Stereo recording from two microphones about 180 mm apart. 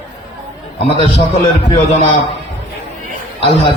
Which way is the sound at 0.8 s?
30° left (ahead or behind).